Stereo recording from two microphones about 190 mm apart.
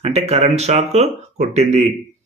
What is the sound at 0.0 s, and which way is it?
Speech, 35° right (ahead or behind).